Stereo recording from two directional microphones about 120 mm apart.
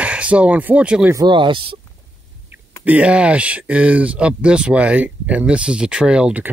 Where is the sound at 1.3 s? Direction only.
45° right (ahead or behind).